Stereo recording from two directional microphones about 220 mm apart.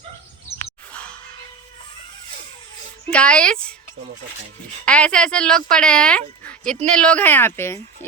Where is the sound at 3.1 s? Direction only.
5° left (ahead or behind).